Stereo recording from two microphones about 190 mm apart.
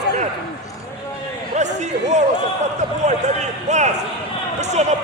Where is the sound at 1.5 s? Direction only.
40° right (ahead or behind).